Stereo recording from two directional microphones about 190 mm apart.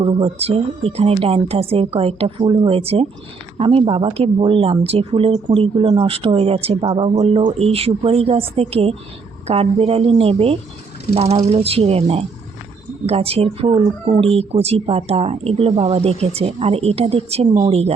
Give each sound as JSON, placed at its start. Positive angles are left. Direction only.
{"t": 0.0, "sound": "speech", "side_deg": -30}